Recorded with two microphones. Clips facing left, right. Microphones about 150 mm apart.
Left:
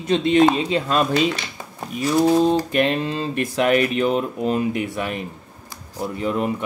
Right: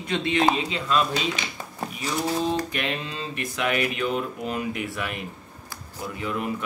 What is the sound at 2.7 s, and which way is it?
Speech, 45° left (ahead or behind).